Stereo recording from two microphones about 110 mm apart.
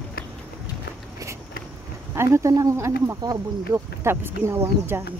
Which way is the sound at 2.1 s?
25° right (ahead or behind).